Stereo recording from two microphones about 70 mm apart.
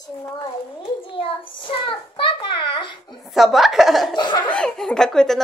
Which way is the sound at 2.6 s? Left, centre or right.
Left.